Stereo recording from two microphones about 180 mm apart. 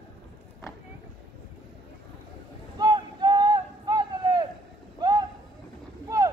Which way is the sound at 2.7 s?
25° right (ahead or behind).